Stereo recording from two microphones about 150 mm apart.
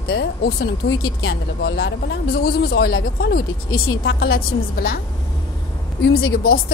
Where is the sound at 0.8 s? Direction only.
85° left.